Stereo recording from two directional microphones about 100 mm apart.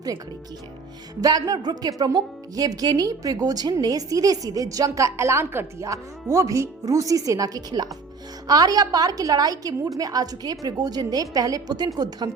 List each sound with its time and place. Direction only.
1.2 s speech: 40° right (ahead or behind)